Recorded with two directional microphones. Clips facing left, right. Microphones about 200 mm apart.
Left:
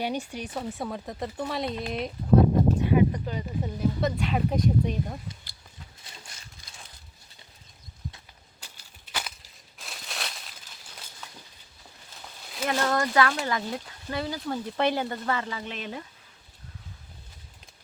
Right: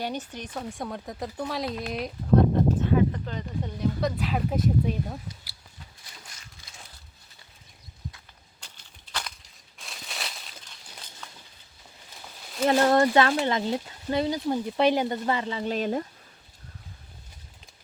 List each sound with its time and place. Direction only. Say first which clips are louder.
0.0 s speech: left 2 dB; 10° left (ahead or behind)
2.8 s speech: left 1 dB; 15° left (ahead or behind); by 5.5 s 5° right (ahead or behind)
8.6 s a sound: left 1 dB; 10° left (ahead or behind)
9.1 s crushing: even; 5° left (ahead or behind)
12.6 s speech: right 6 dB; 30° right (ahead or behind)
15.6 s speech: right 9 dB; 40° right (ahead or behind)